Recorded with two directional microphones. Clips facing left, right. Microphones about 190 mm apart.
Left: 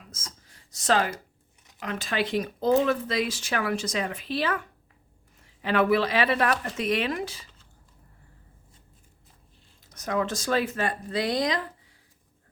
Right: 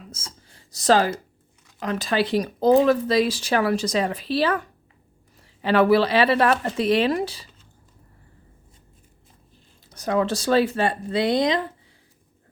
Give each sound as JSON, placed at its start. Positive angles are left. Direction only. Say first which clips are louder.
{"t": 0.1, "sound": "speech", "louder": "right 4 dB", "side_deg": -30}
{"t": 9.9, "sound": "speech", "louder": "right 5 dB", "side_deg": -30}